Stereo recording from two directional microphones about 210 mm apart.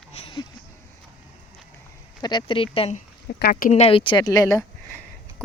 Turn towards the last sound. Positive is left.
turn(degrees=15)  # may be behind; listen again after turning